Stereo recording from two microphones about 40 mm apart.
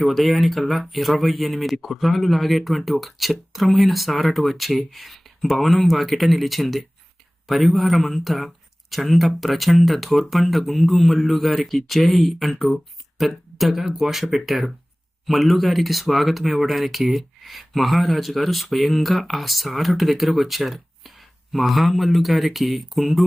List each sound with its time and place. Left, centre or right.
0.0 s speech: centre